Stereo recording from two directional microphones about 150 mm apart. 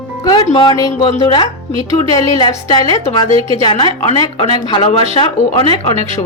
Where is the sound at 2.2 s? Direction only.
30° left (ahead or behind).